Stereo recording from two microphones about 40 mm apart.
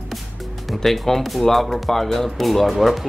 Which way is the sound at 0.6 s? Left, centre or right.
Centre.